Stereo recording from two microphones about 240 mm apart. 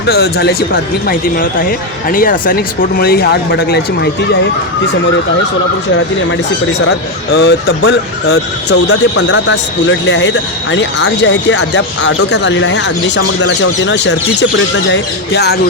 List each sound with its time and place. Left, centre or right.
0.0 s speech: left
7.3 s speech: left